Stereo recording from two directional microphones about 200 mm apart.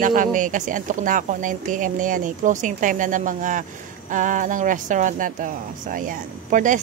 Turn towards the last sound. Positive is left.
turn(degrees=-40)  # may be behind; listen again after turning